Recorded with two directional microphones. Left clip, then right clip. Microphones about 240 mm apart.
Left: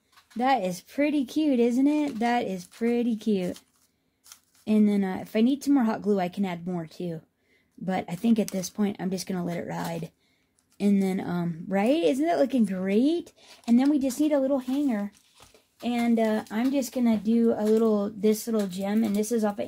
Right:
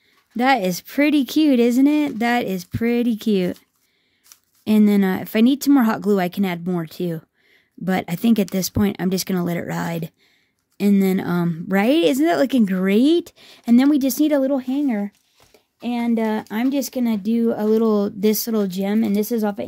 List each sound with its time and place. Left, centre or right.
0.4 s a woman's voice: right
4.6 s a woman's voice: right